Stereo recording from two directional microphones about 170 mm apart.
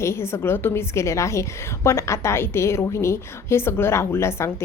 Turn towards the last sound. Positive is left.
turn(degrees=15)  # may be behind; listen again after turning